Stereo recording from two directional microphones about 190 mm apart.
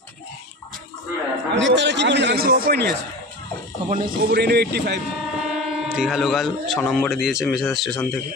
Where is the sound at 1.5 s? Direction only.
70° right (ahead or behind); by 2.9 s 55° right (ahead or behind).